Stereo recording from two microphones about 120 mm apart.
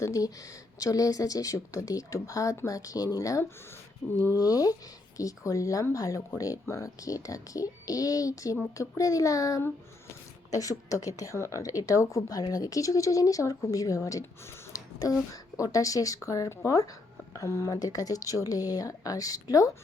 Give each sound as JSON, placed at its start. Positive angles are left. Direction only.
{"t": 0.0, "sound": "speech", "side_deg": 30}